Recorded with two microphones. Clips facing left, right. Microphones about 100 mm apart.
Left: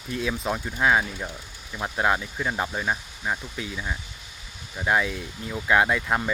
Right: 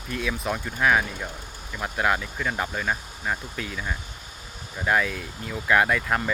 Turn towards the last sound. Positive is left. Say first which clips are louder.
# even
turn(degrees=20)  # may be behind; listen again after turning